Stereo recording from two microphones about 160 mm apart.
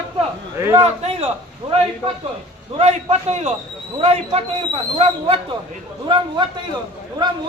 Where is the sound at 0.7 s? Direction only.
40° right (ahead or behind).